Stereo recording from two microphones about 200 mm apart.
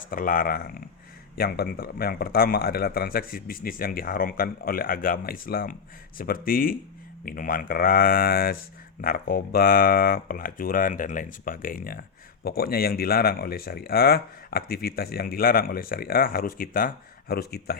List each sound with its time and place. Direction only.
0.1 s speech: 45° left (ahead or behind)